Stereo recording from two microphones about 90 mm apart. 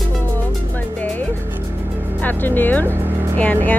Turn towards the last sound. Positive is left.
turn(degrees=15)  # may be behind; listen again after turning